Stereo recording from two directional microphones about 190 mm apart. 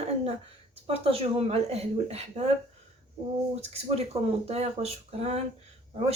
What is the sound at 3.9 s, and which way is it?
A woman's voice, 30° right (ahead or behind).